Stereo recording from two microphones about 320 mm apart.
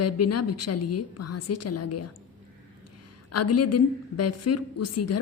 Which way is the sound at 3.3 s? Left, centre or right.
Left.